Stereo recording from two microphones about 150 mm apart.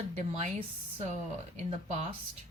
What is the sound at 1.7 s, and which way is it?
Speech, 50° right (ahead or behind).